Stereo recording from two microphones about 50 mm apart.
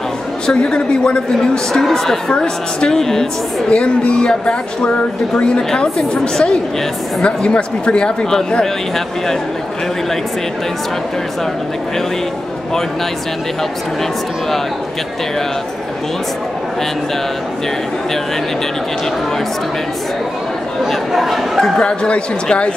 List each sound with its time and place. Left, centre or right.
0.5 s speech: centre
1.7 s a woman's voice: centre
3.7 s a woman's voice: left
20.8 s speech: centre
21.7 s speech: centre